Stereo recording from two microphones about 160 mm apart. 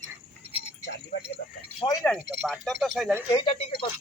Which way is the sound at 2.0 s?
10° left (ahead or behind).